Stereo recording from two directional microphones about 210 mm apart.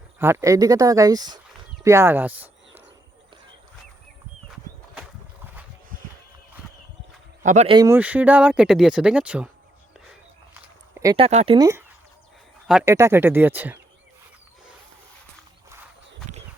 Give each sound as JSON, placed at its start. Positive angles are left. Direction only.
{"t": 0.2, "sound": "speech", "side_deg": -10}
{"t": 7.4, "sound": "speech", "side_deg": -35}
{"t": 7.8, "sound": "speech", "side_deg": -10}
{"t": 11.0, "sound": "speech", "side_deg": -20}
{"t": 11.3, "sound": "speech", "side_deg": -30}
{"t": 11.5, "sound": "speech", "side_deg": -15}